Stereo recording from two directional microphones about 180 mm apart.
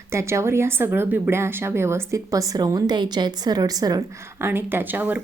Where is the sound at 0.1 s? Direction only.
15° right (ahead or behind).